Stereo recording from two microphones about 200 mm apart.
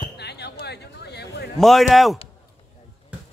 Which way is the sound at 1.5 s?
Centre (ahead or behind).